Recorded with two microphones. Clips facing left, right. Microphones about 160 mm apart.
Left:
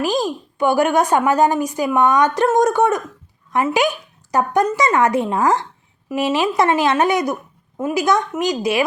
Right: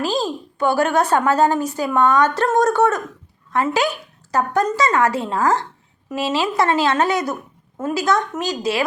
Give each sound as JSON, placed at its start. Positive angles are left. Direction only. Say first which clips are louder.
{"t": 0.0, "sound": "a woman's voice", "louder": "left 2 dB", "side_deg": 15}